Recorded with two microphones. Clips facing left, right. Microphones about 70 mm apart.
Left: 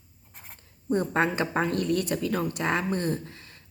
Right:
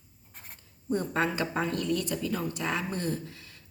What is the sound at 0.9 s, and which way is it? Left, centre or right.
A woman's voice, left.